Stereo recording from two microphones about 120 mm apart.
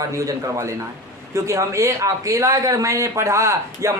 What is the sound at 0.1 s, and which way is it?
A man's voice, 25° right (ahead or behind).